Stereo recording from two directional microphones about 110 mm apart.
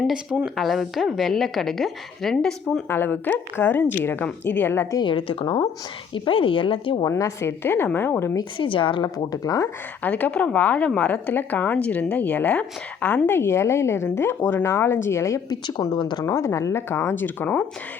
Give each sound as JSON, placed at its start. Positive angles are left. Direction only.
{"t": 0.0, "sound": "a woman's voice", "side_deg": -5}
{"t": 2.9, "sound": "a woman's voice", "side_deg": 15}
{"t": 4.9, "sound": "speech", "side_deg": 50}
{"t": 7.0, "sound": "a woman's voice", "side_deg": 30}
{"t": 8.5, "sound": "speech", "side_deg": 50}
{"t": 9.1, "sound": "speech", "side_deg": 35}
{"t": 10.0, "sound": "a woman's voice", "side_deg": 15}
{"t": 15.4, "sound": "speech", "side_deg": 40}
{"t": 16.2, "sound": "a woman's voice", "side_deg": 25}